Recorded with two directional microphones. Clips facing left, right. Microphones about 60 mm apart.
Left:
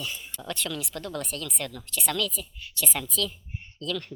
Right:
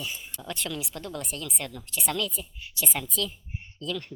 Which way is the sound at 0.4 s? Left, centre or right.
Right.